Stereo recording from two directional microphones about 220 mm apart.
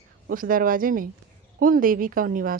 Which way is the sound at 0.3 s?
40° right (ahead or behind).